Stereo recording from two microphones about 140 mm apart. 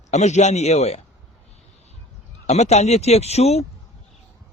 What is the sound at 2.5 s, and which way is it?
Speech, 50° left (ahead or behind).